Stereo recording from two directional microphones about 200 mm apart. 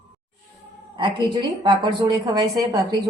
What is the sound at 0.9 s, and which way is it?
A woman's voice, 20° right (ahead or behind).